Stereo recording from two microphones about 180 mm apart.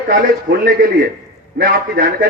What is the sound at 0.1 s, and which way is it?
A man's voice, 55° right (ahead or behind).